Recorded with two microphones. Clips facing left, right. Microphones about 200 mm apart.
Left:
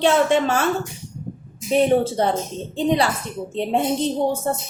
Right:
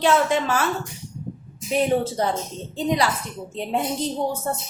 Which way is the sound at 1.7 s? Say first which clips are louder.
Left 4 dB; 30° left (ahead or behind).